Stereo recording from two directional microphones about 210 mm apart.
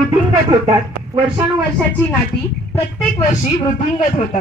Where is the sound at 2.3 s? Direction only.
50° left (ahead or behind).